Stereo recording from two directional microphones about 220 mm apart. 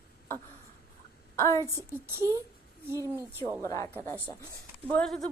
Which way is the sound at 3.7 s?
10° left (ahead or behind).